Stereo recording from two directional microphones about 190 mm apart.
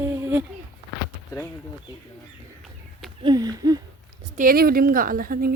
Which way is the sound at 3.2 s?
20° right (ahead or behind).